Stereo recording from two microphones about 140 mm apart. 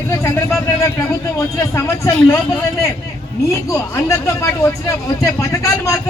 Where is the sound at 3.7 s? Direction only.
20° left (ahead or behind).